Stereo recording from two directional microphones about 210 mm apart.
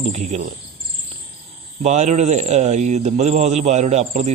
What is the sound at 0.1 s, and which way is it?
Speech, 35° right (ahead or behind).